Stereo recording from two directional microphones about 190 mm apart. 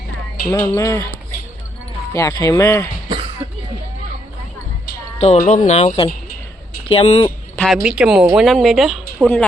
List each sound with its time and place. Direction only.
0.5 s speech: 15° left (ahead or behind)
2.1 s speech: 15° left (ahead or behind)
5.2 s speech: 40° left (ahead or behind)
7.3 s a woman's voice: 5° left (ahead or behind)